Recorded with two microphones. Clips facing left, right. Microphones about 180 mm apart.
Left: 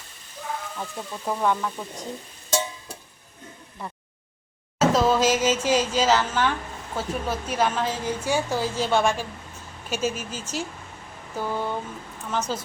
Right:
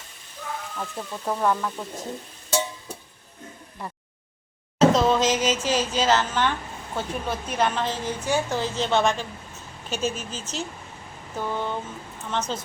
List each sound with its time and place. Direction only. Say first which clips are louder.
0.8 s speech: right 1 dB; centre (ahead or behind)
3.8 s a sound: even; centre (ahead or behind)
4.8 s a woman's voice: right 1 dB; 5° left (ahead or behind)